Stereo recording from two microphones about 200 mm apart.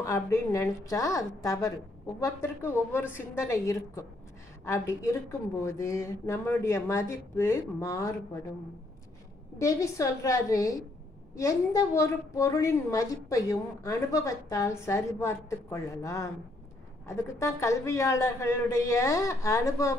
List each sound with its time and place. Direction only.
0.0 s a woman's voice: 15° left (ahead or behind)
9.6 s a woman's voice: 15° left (ahead or behind)